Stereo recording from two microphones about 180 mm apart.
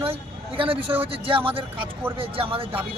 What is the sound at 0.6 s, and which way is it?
Speech, 30° right (ahead or behind).